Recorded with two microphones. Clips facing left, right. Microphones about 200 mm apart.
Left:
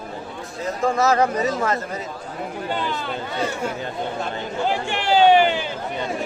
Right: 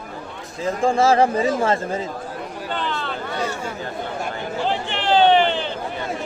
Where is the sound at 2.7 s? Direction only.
10° left (ahead or behind).